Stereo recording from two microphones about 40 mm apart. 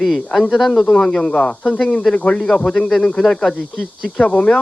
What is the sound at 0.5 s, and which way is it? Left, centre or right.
Speech, centre.